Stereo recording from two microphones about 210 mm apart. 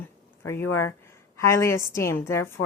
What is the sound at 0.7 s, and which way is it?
Speech, 90° left.